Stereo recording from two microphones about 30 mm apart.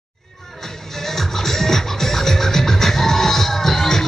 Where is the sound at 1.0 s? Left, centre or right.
Centre.